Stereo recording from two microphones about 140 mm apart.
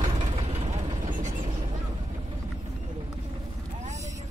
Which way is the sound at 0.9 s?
60° right (ahead or behind).